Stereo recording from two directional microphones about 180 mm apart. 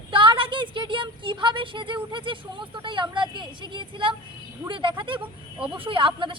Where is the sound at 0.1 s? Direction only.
30° right (ahead or behind).